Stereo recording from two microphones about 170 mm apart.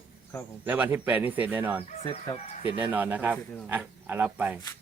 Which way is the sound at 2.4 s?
30° left (ahead or behind).